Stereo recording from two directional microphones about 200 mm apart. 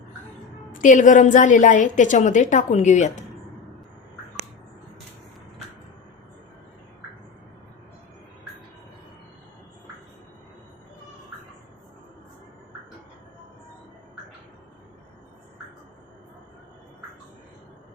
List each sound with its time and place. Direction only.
0.7 s a woman's voice: 40° left (ahead or behind)